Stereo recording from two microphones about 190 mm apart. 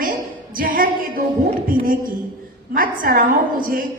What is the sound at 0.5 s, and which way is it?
A woman's voice, 50° right (ahead or behind).